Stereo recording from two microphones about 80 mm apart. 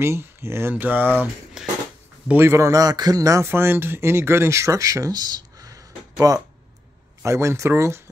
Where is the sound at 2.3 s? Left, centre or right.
Right.